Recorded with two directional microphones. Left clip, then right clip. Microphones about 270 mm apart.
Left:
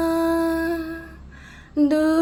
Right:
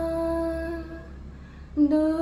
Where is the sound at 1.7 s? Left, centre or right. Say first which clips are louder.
Left 3 dB; left.